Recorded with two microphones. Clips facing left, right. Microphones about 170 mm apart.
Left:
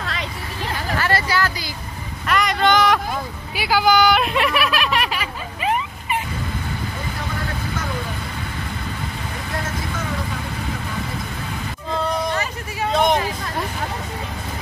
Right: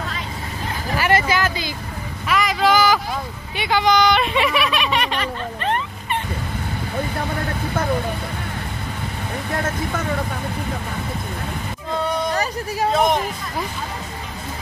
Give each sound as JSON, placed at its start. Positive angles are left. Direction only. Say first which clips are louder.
{"t": 0.9, "sound": "vehicle", "louder": "right 3 dB", "side_deg": -15}
{"t": 2.2, "sound": "vehicle", "louder": "even", "side_deg": 0}
{"t": 3.5, "sound": "a sound", "louder": "left 1 dB", "side_deg": 5}
{"t": 12.9, "sound": "speech", "louder": "left 1 dB", "side_deg": 0}